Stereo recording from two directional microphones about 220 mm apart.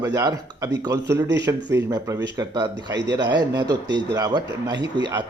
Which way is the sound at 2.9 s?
50° right (ahead or behind).